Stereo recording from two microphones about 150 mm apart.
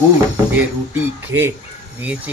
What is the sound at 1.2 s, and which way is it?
Speech, 15° right (ahead or behind).